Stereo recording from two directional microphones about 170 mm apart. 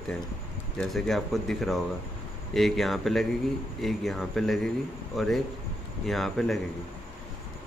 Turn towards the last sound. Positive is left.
turn(degrees=0)  # may be behind; listen again after turning